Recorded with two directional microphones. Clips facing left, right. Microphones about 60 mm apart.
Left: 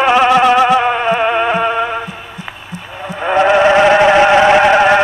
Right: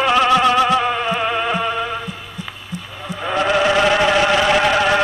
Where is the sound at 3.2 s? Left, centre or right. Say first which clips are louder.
Left 7 dB; left.